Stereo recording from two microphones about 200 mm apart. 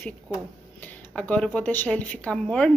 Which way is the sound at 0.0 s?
10° left (ahead or behind).